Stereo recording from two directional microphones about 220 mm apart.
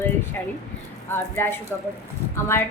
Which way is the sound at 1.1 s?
10° left (ahead or behind).